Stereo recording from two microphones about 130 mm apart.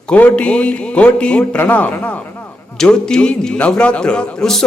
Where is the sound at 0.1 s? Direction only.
10° left (ahead or behind).